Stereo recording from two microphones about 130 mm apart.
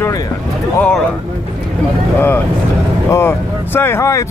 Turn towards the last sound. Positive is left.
turn(degrees=25)  # may be behind; listen again after turning